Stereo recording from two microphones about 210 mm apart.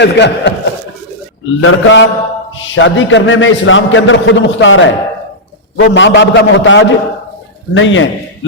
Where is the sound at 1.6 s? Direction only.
70° left (ahead or behind).